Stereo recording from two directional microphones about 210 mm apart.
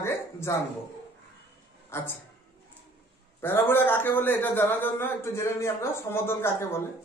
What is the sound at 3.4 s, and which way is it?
A man's voice, 10° left (ahead or behind).